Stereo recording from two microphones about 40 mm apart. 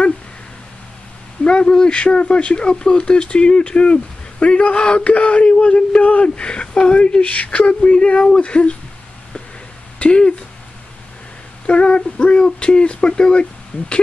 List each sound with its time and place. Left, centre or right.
1.4 s speech: left
9.9 s speech: left
11.6 s speech: left